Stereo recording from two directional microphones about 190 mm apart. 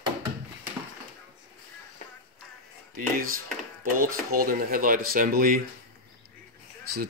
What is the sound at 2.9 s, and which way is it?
Speech, 50° right (ahead or behind).